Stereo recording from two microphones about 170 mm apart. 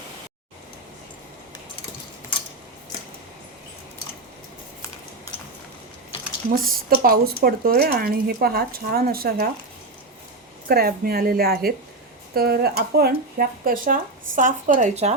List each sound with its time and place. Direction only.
6.9 s speech: 60° right (ahead or behind)
10.7 s speech: 65° right (ahead or behind); by 15.1 s 45° right (ahead or behind)